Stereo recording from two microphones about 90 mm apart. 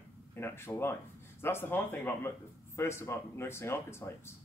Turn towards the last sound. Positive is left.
turn(degrees=30)  # may be behind; listen again after turning